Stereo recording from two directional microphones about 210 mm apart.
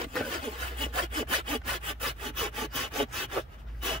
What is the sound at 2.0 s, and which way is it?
Sawing, centre (ahead or behind).